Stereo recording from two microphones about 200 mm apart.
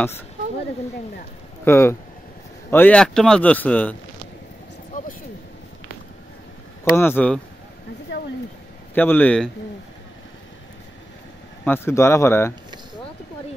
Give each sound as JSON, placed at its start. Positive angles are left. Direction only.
{"t": 1.6, "sound": "speech", "side_deg": 10}
{"t": 4.9, "sound": "a sound", "side_deg": 40}
{"t": 6.8, "sound": "speech", "side_deg": 10}
{"t": 8.1, "sound": "a sound", "side_deg": 65}
{"t": 8.9, "sound": "speech", "side_deg": 10}
{"t": 11.6, "sound": "speech", "side_deg": 10}